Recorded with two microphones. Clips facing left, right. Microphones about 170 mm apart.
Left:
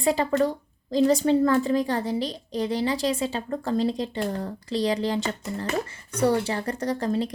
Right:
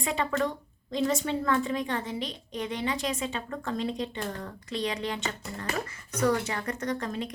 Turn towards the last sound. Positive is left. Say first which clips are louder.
# left 6 dB
turn(degrees=35)  # may be behind; listen again after turning